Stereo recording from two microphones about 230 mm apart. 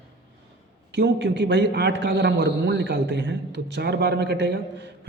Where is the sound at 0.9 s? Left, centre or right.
Right.